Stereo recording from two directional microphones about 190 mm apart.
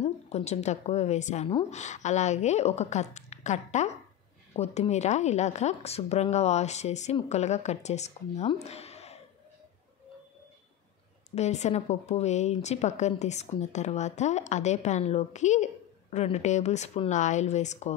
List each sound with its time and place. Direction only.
0.0 s a woman's voice: 35° left (ahead or behind)
11.3 s a woman's voice: 35° left (ahead or behind)